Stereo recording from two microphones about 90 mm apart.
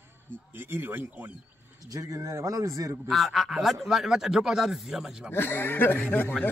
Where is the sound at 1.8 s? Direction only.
40° right (ahead or behind).